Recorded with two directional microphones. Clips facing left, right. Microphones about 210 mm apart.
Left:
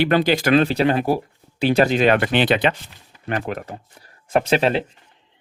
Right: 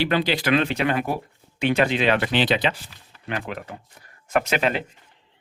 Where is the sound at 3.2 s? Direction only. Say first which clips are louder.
Left 5 dB; 45° left (ahead or behind).